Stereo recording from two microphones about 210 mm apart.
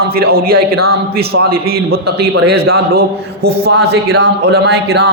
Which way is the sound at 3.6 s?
55° right (ahead or behind).